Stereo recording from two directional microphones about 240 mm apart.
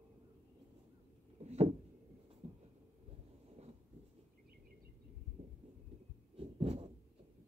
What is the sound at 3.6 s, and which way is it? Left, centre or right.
Writing, right.